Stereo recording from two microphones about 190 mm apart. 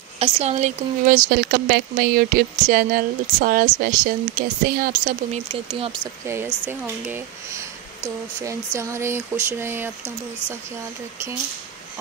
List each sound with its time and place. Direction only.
0.2 s speech: 35° right (ahead or behind)
5.5 s speech: 30° right (ahead or behind)
6.2 s speech: 10° right (ahead or behind)